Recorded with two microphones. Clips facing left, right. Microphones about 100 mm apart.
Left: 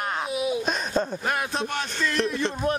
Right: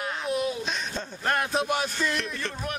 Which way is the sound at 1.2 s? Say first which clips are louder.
Right 1 dB; 5° left (ahead or behind).